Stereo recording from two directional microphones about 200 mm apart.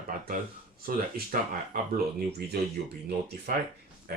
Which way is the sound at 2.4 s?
55° right (ahead or behind).